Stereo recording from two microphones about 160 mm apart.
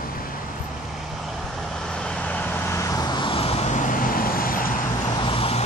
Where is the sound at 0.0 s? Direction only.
65° left (ahead or behind).